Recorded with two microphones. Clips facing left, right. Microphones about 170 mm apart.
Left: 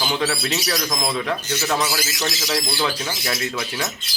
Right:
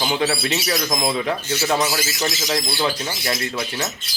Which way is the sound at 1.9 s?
20° right (ahead or behind).